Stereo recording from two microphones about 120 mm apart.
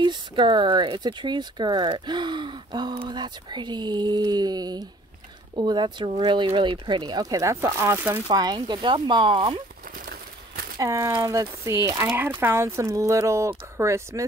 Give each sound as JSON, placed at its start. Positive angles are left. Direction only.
{"t": 0.0, "sound": "speech", "side_deg": -40}
{"t": 8.3, "sound": "speech", "side_deg": -35}
{"t": 10.8, "sound": "speech", "side_deg": -30}